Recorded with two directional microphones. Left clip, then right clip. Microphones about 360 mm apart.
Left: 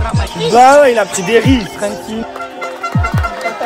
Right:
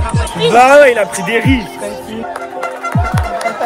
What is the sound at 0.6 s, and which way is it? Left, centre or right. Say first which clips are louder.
Speech: even; centre.